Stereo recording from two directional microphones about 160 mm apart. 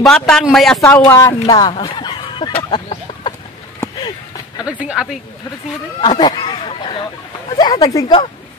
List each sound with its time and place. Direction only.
0.0 s a man's voice: 5° left (ahead or behind)
0.8 s speech: 15° left (ahead or behind)
1.5 s chicken: 25° left (ahead or behind)
4.6 s a sound: 5° right (ahead or behind)
5.9 s speech: 30° left (ahead or behind)